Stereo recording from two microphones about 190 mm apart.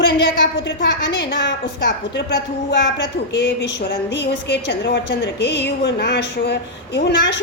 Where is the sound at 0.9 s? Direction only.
70° left (ahead or behind).